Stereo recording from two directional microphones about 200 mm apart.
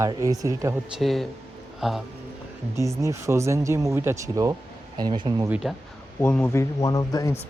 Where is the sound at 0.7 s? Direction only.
Centre (ahead or behind).